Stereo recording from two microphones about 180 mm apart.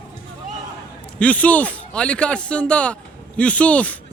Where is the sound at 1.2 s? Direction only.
5° left (ahead or behind).